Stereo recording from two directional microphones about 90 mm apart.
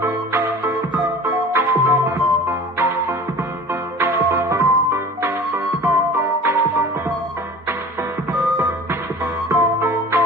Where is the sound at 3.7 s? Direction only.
30° right (ahead or behind).